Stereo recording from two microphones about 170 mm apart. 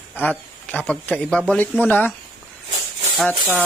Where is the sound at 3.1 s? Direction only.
5° left (ahead or behind).